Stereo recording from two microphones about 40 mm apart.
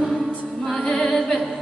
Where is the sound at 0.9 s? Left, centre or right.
Centre.